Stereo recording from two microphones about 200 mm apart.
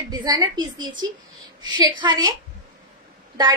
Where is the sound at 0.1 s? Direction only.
20° right (ahead or behind).